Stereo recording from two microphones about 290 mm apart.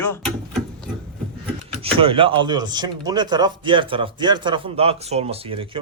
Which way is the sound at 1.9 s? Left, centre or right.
Centre.